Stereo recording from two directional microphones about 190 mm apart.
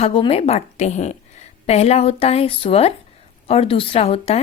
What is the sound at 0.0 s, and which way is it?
A woman's voice, 30° left (ahead or behind).